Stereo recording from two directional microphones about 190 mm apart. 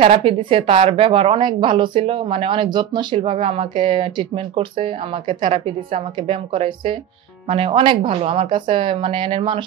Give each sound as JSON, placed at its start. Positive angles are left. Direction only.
{"t": 0.0, "sound": "a woman's voice", "side_deg": -30}